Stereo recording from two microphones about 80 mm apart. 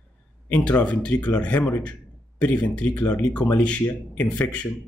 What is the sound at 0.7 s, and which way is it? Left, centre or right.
Speech, centre.